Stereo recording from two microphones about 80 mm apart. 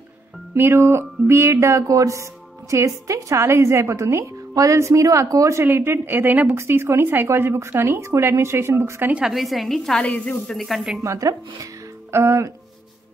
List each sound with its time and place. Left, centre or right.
0.6 s a woman's voice: right
5.7 s speech: right
6.5 s a woman's voice: right
9.1 s a woman's voice: centre
9.9 s speech: centre
10.5 s a woman's voice: centre
11.0 s speech: right
12.1 s a woman's voice: right